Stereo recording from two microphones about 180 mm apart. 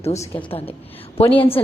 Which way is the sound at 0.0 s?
40° left (ahead or behind).